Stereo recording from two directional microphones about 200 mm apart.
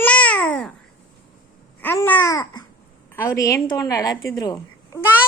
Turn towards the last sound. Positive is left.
turn(degrees=20)  # may be behind; listen again after turning